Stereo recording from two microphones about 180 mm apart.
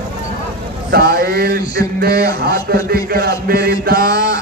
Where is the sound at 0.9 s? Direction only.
55° right (ahead or behind).